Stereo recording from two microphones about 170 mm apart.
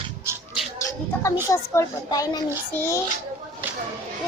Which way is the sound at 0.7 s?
15° left (ahead or behind).